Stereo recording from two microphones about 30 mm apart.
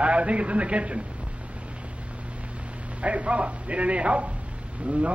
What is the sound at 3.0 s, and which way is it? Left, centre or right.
A man's voice, right.